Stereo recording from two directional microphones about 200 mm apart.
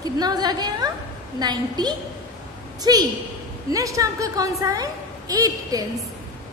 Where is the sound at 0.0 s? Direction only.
20° right (ahead or behind).